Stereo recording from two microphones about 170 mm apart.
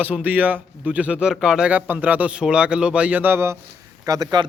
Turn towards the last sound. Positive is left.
turn(degrees=-25)  # may be behind; listen again after turning